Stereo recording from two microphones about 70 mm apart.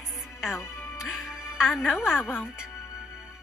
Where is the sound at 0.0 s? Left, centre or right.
Centre.